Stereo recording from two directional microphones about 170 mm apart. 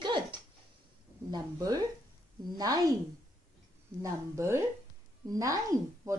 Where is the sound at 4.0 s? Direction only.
15° right (ahead or behind).